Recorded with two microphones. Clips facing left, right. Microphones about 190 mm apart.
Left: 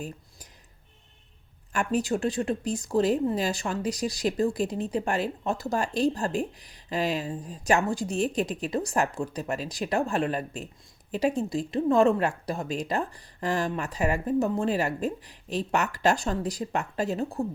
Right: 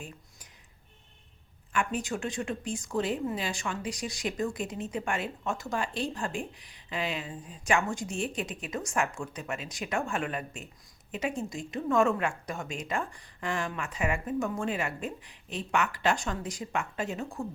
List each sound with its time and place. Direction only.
1.7 s speech: 40° left (ahead or behind)